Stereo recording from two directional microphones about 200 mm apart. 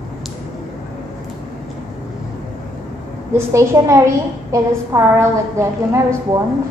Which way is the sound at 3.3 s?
15° right (ahead or behind).